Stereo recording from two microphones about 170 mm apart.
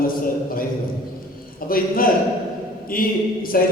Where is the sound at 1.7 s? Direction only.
60° left (ahead or behind).